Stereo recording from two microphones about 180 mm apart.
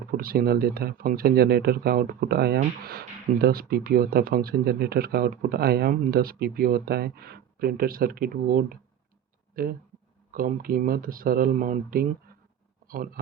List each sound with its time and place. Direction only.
0.2 s speech: 55° right (ahead or behind)